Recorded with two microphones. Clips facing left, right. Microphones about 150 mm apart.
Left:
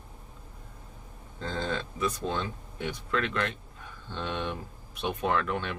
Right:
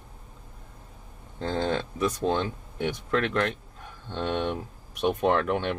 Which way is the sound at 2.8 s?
60° right (ahead or behind).